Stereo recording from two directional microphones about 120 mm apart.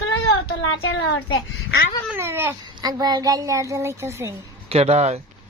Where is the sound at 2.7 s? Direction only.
35° right (ahead or behind).